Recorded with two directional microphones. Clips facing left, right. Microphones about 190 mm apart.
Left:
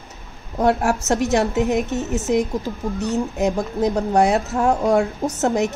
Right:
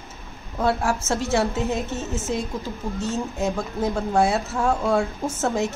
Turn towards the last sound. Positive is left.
turn(degrees=15)  # may be behind; listen again after turning